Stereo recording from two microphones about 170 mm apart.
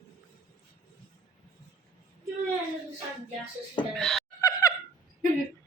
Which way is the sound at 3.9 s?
5° left (ahead or behind).